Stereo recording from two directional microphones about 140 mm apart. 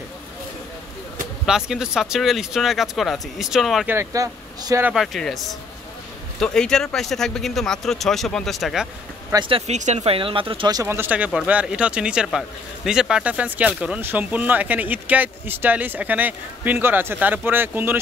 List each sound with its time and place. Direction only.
1.4 s speech: 5° right (ahead or behind)
3.8 s speech: 20° right (ahead or behind)
4.8 s speech: centre (ahead or behind)
9.3 s speech: 35° right (ahead or behind)
9.7 s speech: 55° right (ahead or behind); by 10.8 s 40° right (ahead or behind)
10.8 s speech: 15° right (ahead or behind)